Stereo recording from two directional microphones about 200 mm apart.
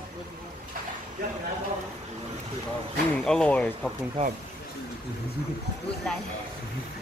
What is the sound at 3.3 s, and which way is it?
Speech, 5° left (ahead or behind).